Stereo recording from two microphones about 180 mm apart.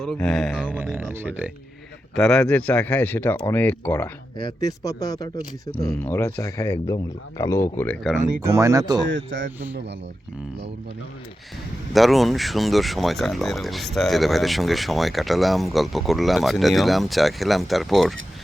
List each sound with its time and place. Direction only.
0.0 s speech: centre (ahead or behind)
2.1 s speech: 5° left (ahead or behind)
4.4 s speech: 20° left (ahead or behind)
8.5 s speech: 20° right (ahead or behind)
11.9 s speech: centre (ahead or behind)